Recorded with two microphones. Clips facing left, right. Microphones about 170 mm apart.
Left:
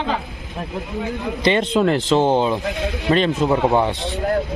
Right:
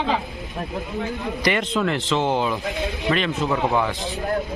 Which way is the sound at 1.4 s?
30° left (ahead or behind).